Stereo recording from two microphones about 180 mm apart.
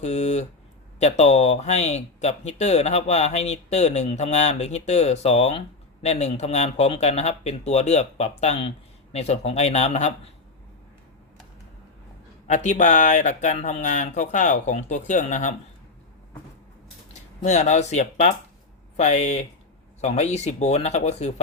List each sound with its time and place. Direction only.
0.0 s speech: 40° left (ahead or behind)
12.5 s speech: 40° left (ahead or behind)
17.2 s speech: 40° left (ahead or behind)